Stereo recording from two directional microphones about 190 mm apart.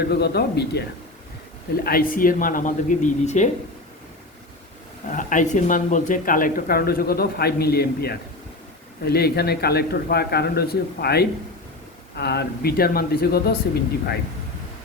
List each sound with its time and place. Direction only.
0.1 s a man's voice: 60° left (ahead or behind); by 3.5 s 40° left (ahead or behind)
5.1 s a man's voice: 40° left (ahead or behind)